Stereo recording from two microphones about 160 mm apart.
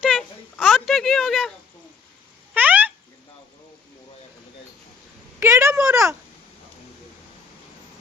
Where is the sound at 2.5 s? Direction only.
10° right (ahead or behind).